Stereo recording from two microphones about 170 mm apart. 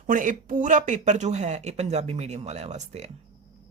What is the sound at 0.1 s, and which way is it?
Speech, 50° right (ahead or behind).